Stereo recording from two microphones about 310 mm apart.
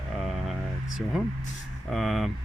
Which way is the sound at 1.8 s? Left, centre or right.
Centre.